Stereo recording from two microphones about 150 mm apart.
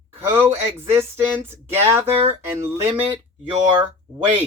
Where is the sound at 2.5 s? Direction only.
20° right (ahead or behind).